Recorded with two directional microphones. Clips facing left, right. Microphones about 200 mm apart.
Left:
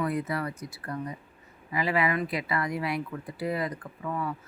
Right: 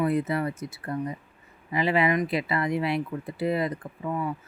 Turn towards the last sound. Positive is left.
turn(degrees=-20)  # may be behind; listen again after turning